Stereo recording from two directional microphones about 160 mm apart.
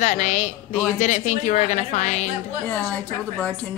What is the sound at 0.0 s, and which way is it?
Speech, 50° left (ahead or behind).